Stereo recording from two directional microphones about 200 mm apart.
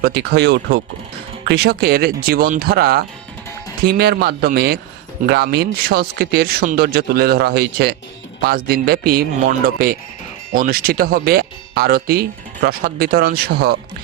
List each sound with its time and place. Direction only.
0.0 s speech: 55° right (ahead or behind)